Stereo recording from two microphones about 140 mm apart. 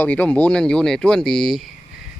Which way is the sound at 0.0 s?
10° left (ahead or behind).